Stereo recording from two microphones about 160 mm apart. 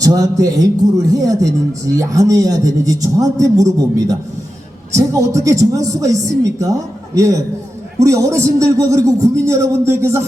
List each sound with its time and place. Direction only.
0.0 s a man's voice: 20° right (ahead or behind)